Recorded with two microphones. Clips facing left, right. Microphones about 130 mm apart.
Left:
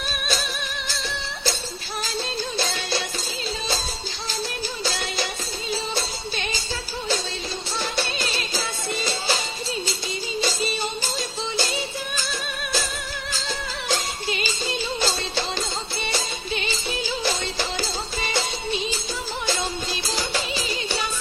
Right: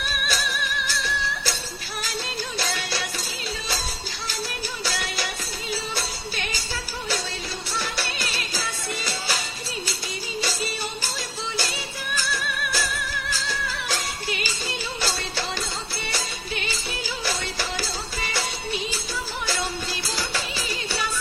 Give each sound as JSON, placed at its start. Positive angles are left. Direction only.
{"t": 0.0, "sound": "music", "side_deg": 25}
{"t": 2.6, "sound": "music", "side_deg": 25}
{"t": 4.8, "sound": "music", "side_deg": 25}
{"t": 7.8, "sound": "music", "side_deg": 25}
{"t": 10.4, "sound": "music", "side_deg": 25}
{"t": 12.1, "sound": "music", "side_deg": 25}